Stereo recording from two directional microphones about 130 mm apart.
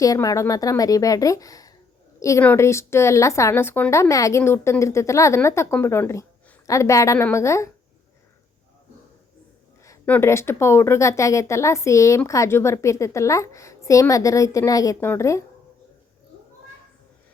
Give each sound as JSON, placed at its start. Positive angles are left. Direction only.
{"t": 0.0, "sound": "speech", "side_deg": 25}
{"t": 10.1, "sound": "speech", "side_deg": 20}